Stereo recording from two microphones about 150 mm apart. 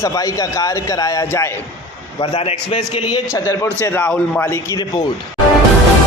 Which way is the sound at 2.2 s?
40° left (ahead or behind).